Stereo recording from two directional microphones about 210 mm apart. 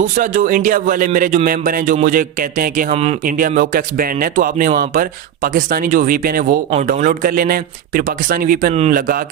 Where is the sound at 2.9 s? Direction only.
30° right (ahead or behind).